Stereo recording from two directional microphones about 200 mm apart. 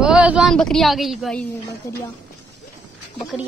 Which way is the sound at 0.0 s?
5° right (ahead or behind).